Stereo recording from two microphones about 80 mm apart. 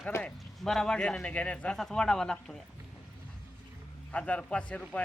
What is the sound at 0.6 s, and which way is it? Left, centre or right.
A man's voice, centre.